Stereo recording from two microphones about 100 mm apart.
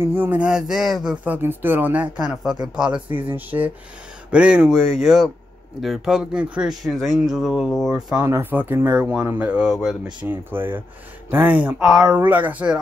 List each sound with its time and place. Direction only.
0.0 s speech: 20° right (ahead or behind); by 1.2 s 5° right (ahead or behind)
1.2 s speech: 20° right (ahead or behind)
4.6 s speech: centre (ahead or behind)
8.3 s speech: 20° right (ahead or behind)
9.7 s speech: centre (ahead or behind)
10.2 s speech: 20° right (ahead or behind)
11.8 s speech: 5° right (ahead or behind)
12.2 s speech: 20° right (ahead or behind)